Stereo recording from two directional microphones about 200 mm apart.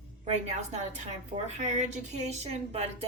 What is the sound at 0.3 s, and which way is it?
Speech, 35° right (ahead or behind).